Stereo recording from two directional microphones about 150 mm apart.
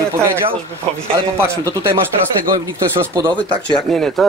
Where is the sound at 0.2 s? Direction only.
15° right (ahead or behind).